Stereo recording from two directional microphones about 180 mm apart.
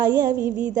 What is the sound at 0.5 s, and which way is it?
Speech, 45° right (ahead or behind).